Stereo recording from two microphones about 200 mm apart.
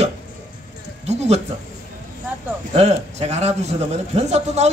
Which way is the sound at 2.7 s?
35° right (ahead or behind).